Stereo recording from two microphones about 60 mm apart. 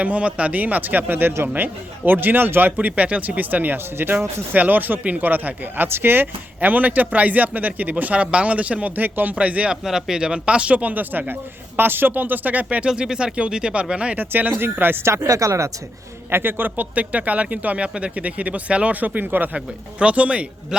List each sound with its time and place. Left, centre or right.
0.0 s speech: right
9.8 s speech: centre; by 12.6 s right
12.9 s speech: centre
14.2 s speech: right
15.0 s speech: right
16.3 s speech: right
19.5 s speech: right